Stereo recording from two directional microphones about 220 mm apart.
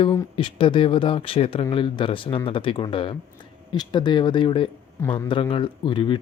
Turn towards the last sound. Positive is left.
turn(degrees=20)  # may be behind; listen again after turning